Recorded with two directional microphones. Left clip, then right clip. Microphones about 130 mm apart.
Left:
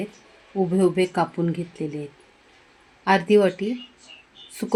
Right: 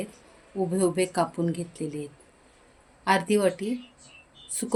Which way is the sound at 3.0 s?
65° left (ahead or behind).